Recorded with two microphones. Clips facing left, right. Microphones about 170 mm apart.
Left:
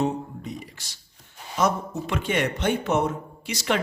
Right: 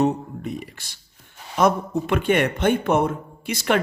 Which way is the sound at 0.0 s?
60° right (ahead or behind).